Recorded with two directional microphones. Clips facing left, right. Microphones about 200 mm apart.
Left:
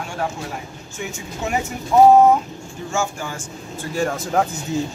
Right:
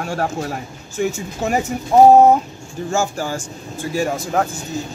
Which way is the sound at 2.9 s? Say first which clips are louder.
Right 4 dB; 35° right (ahead or behind).